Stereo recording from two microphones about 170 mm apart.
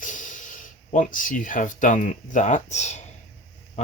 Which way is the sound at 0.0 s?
50° left (ahead or behind).